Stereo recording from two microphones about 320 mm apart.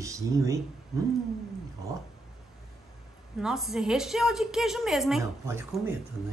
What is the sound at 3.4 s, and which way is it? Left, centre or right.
A woman's voice, centre.